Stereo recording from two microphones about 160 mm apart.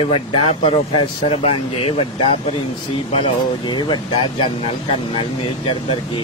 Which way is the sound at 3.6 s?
30° left (ahead or behind).